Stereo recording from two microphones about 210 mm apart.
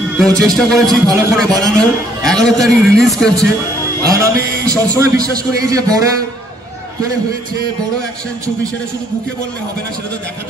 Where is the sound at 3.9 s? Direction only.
15° right (ahead or behind).